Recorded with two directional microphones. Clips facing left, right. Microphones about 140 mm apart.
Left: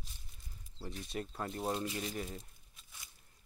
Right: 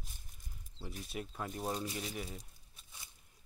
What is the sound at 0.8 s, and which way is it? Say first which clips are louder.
Speech: left 2 dB; 5° right (ahead or behind).